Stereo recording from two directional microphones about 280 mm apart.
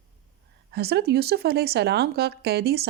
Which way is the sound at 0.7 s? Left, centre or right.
Right.